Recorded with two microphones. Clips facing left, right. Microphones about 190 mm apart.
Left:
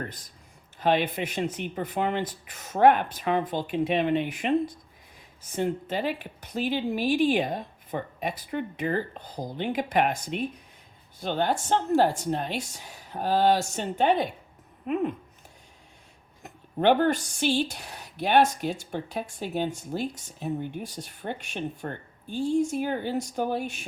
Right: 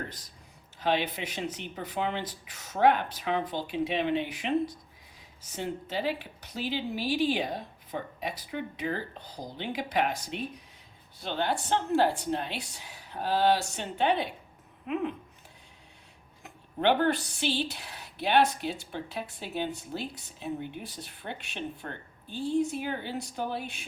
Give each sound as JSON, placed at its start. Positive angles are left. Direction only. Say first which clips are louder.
{"t": 0.8, "sound": "speech", "louder": "left 4 dB", "side_deg": 50}
{"t": 16.4, "sound": "speech", "louder": "left 4 dB", "side_deg": 45}